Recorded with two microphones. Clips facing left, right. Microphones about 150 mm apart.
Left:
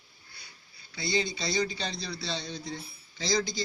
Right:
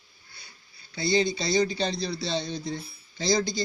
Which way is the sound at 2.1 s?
25° right (ahead or behind).